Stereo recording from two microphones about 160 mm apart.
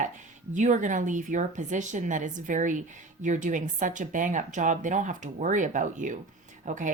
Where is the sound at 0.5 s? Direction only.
50° right (ahead or behind).